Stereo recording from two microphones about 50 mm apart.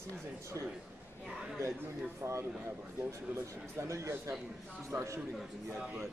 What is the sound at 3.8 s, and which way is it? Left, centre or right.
Speech, right.